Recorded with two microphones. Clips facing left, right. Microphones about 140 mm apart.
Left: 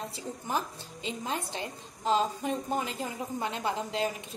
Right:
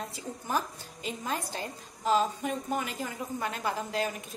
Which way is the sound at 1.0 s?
25° left (ahead or behind).